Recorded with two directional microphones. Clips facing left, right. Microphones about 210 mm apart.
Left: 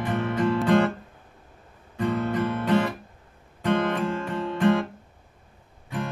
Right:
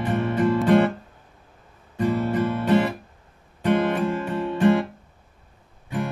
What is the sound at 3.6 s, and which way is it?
Music, 10° right (ahead or behind).